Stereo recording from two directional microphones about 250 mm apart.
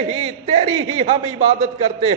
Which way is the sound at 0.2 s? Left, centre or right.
Right.